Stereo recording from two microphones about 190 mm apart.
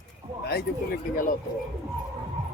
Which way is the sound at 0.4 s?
55° left (ahead or behind).